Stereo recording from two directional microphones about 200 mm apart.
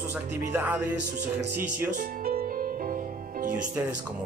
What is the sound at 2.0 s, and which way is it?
Music, 45° right (ahead or behind).